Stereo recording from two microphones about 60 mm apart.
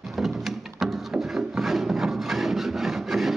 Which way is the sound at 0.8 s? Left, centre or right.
Centre.